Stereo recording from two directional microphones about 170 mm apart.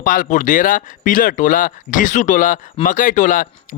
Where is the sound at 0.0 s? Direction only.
50° left (ahead or behind).